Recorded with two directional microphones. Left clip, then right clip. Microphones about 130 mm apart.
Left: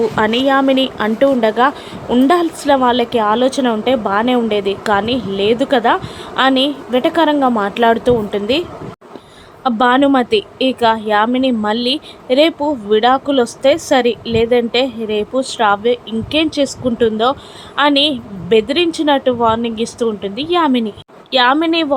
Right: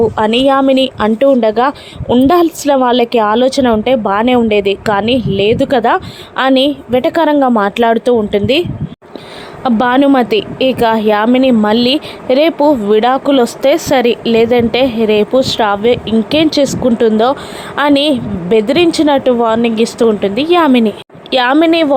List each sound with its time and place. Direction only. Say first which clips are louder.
0.2 s speech: right 1 dB; 30° right (ahead or behind)
9.6 s speech: right 2 dB; 45° right (ahead or behind)